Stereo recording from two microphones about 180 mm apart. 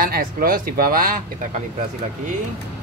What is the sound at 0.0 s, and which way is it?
Speech, 55° right (ahead or behind).